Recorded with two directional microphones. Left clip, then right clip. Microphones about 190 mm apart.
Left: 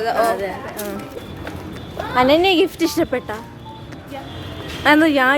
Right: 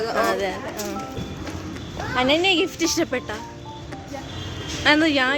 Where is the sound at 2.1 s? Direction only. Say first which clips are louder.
Left 5 dB; 25° left (ahead or behind).